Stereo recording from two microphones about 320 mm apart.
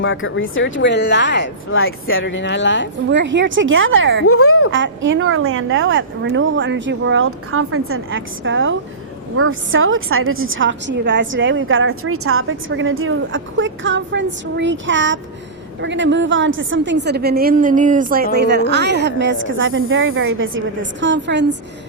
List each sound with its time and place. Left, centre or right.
0.0 s speech: left
3.1 s a woman's voice: right
4.3 s a woman's voice: left
4.7 s a woman's voice: right